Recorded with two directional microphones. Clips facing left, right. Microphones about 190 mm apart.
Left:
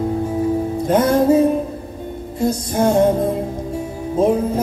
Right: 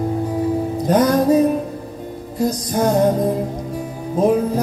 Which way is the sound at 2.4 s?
25° left (ahead or behind).